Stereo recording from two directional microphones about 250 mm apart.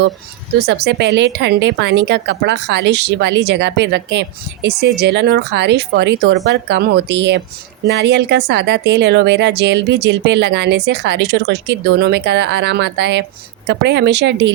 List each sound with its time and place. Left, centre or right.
0.6 s speech: right